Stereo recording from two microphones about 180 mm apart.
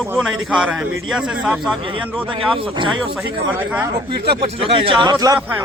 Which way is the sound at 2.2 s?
30° right (ahead or behind).